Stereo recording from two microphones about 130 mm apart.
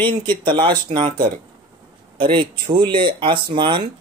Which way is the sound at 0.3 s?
40° right (ahead or behind).